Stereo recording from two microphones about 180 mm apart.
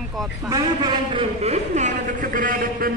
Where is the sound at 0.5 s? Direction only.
25° right (ahead or behind).